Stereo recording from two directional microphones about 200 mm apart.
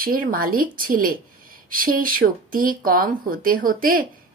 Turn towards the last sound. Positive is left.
turn(degrees=-45)  # may be behind; listen again after turning